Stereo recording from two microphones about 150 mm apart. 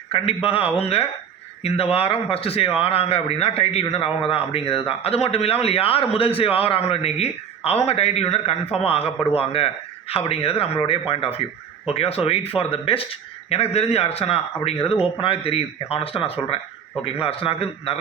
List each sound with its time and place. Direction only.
0.1 s a man's voice: 40° left (ahead or behind)